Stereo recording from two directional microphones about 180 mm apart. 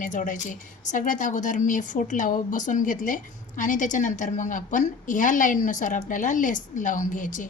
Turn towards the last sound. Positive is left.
turn(degrees=45)  # may be behind; listen again after turning